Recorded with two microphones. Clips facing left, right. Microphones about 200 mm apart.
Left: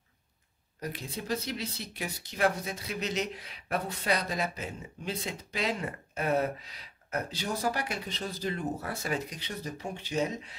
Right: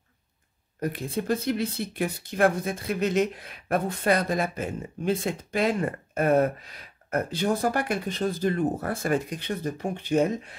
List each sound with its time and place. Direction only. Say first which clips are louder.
0.7 s speech: right 9 dB; 55° right (ahead or behind)